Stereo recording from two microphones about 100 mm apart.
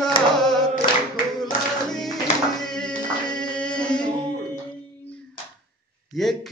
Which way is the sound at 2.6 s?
5° left (ahead or behind).